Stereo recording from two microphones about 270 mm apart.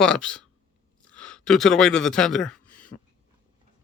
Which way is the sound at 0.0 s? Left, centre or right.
Centre.